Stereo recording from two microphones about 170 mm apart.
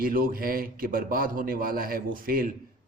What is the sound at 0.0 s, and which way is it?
A man's voice, 60° right (ahead or behind).